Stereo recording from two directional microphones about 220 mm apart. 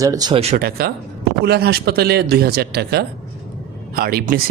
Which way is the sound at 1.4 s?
50° right (ahead or behind).